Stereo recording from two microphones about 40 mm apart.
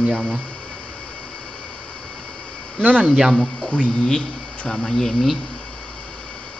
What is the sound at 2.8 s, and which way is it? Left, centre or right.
Speech, right.